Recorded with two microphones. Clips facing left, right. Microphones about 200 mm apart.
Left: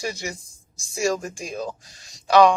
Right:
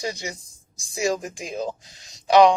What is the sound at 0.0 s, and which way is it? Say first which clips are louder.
Speech: even; 20° right (ahead or behind).